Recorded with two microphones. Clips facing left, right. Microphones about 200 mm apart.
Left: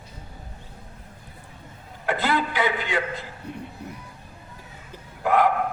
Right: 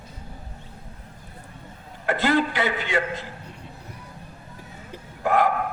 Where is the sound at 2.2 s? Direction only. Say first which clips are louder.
Right 3 dB; 45° right (ahead or behind).